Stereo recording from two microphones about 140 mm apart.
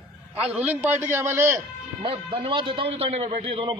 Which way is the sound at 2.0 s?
40° right (ahead or behind).